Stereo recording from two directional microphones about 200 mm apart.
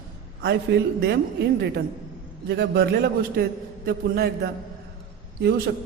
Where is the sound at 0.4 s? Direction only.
55° right (ahead or behind).